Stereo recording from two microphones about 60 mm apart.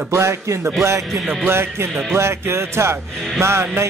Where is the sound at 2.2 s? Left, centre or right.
Right.